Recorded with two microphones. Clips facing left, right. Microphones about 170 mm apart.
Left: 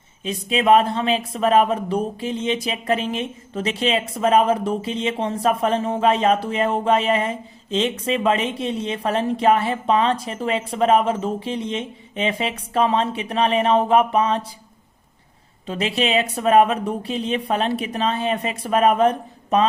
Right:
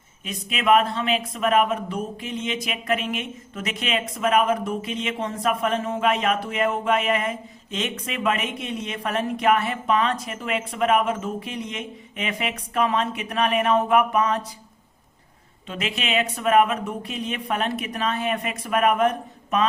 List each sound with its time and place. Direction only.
0.3 s speech: 30° left (ahead or behind)
15.6 s speech: 35° left (ahead or behind)